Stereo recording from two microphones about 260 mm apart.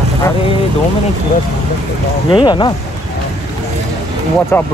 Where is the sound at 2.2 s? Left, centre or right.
Centre.